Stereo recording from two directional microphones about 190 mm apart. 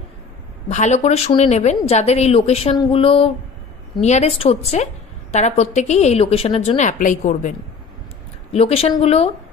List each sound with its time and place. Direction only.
0.7 s a woman's voice: 35° left (ahead or behind)
8.5 s a woman's voice: 35° left (ahead or behind)